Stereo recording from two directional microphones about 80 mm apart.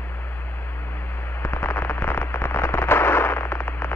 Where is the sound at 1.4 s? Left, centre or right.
Left.